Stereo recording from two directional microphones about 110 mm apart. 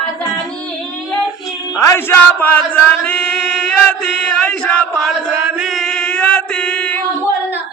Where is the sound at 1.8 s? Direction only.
25° left (ahead or behind).